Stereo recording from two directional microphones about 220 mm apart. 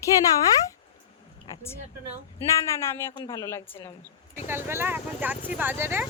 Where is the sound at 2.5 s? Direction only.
10° left (ahead or behind).